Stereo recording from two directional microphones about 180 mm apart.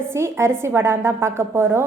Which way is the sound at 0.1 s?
15° right (ahead or behind).